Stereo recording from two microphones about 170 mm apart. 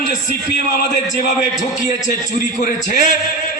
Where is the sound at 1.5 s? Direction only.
45° left (ahead or behind).